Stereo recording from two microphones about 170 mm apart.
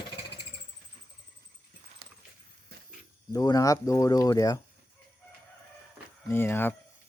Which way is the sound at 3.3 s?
20° left (ahead or behind).